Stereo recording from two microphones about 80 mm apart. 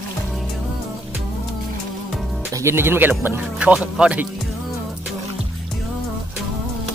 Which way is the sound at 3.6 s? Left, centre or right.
Centre.